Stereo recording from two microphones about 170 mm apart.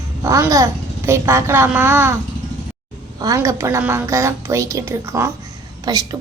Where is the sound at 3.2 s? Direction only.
20° right (ahead or behind).